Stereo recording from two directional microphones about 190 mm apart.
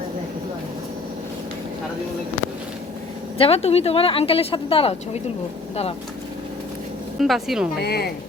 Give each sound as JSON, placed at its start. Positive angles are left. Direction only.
{"t": 3.3, "sound": "speech", "side_deg": 30}
{"t": 7.2, "sound": "speech", "side_deg": 0}
{"t": 7.8, "sound": "speech", "side_deg": 55}